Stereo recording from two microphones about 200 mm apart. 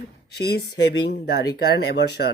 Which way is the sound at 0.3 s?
55° left (ahead or behind).